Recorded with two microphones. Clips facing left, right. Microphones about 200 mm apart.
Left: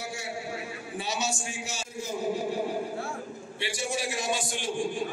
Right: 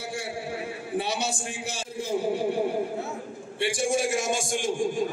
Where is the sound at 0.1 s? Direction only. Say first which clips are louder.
Right 3 dB; 55° right (ahead or behind).